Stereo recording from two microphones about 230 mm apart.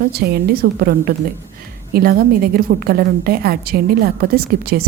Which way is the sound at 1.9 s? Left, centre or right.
Right.